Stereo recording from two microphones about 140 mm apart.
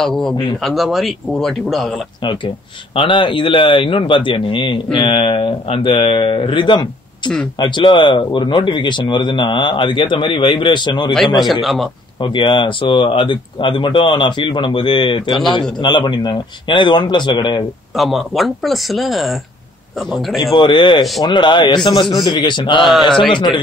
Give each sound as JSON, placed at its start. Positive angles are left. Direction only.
{"t": 0.0, "sound": "speech", "side_deg": 5}
{"t": 2.2, "sound": "speech", "side_deg": 40}
{"t": 11.6, "sound": "speech", "side_deg": 0}
{"t": 12.2, "sound": "speech", "side_deg": 35}
{"t": 17.9, "sound": "speech", "side_deg": 0}
{"t": 20.5, "sound": "speech", "side_deg": 35}
{"t": 22.8, "sound": "speech", "side_deg": 0}
{"t": 23.3, "sound": "speech", "side_deg": 35}